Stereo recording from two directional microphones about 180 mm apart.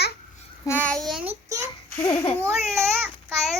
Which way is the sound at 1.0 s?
Centre (ahead or behind).